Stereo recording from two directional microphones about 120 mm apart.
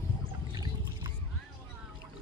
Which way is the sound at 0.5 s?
35° right (ahead or behind).